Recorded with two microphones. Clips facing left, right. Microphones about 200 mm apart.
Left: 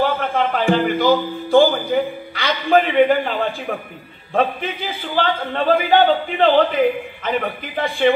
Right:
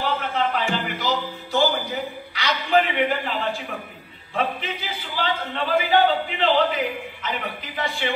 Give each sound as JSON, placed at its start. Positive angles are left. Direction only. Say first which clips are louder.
{"t": 0.0, "sound": "a man's voice", "louder": "left 5 dB", "side_deg": 55}